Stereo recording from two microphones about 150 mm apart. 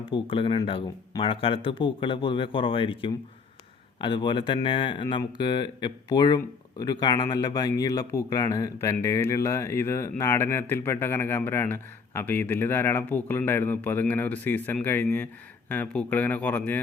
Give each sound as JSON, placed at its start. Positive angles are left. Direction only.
{"t": 0.1, "sound": "speech", "side_deg": 35}